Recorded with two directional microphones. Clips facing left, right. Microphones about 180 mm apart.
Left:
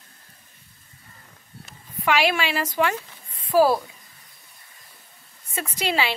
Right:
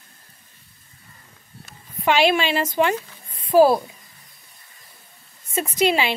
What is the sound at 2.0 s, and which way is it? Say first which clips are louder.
A woman's voice: right 4 dB; 25° right (ahead or behind).